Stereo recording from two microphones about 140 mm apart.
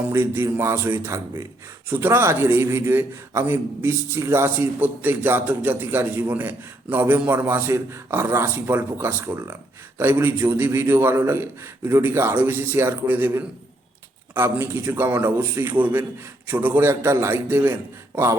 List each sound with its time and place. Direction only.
0.1 s a man's voice: 20° right (ahead or behind)